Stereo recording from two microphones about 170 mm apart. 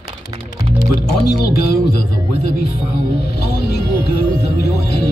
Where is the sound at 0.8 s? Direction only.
70° left (ahead or behind).